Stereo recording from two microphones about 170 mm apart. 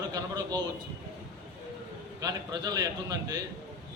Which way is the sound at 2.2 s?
20° right (ahead or behind).